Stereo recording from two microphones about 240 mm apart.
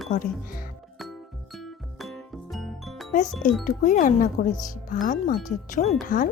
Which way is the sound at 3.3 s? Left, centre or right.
Centre.